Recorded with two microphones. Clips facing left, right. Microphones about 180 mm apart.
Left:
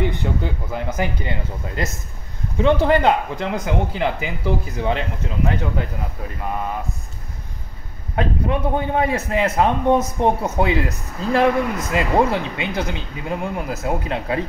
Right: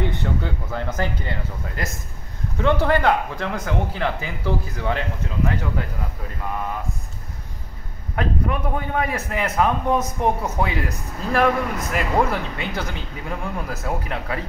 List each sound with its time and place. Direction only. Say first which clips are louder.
0.0 s speech: left 2 dB; 15° left (ahead or behind)
8.2 s speech: left 3 dB; 25° left (ahead or behind)